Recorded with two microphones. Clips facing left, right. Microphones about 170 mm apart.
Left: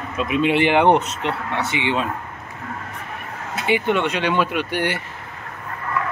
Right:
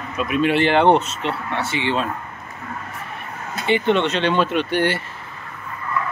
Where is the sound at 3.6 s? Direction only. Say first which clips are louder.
Right 2 dB; 10° left (ahead or behind).